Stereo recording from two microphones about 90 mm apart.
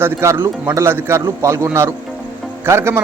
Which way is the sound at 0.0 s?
30° right (ahead or behind).